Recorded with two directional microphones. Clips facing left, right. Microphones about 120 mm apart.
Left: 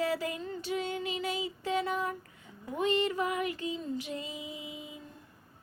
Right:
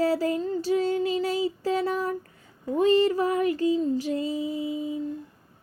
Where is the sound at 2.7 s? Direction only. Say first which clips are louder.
Right 9 dB; 35° right (ahead or behind).